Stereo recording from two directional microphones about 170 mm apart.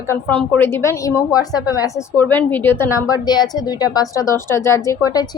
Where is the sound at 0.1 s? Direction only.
10° left (ahead or behind).